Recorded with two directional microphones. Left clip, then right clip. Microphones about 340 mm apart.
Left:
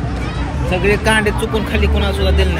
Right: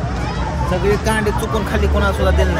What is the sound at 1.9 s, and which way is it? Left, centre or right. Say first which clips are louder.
Speech: right 1 dB; centre.